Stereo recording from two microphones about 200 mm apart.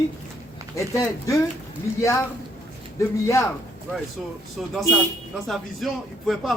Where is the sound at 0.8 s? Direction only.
15° left (ahead or behind).